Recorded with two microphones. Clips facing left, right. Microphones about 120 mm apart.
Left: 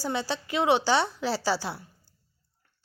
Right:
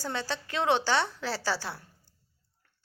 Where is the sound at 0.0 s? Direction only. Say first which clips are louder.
Left 4 dB; 15° left (ahead or behind).